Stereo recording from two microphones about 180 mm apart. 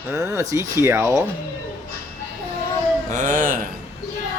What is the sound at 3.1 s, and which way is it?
Speech, 45° right (ahead or behind).